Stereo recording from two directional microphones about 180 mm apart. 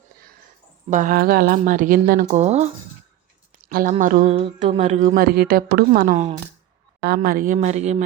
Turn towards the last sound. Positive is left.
turn(degrees=-40)  # may be behind; listen again after turning